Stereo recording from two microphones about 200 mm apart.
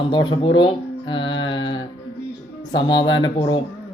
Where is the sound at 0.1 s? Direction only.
25° left (ahead or behind).